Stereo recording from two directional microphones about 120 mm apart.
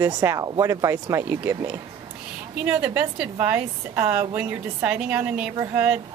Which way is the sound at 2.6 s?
10° right (ahead or behind).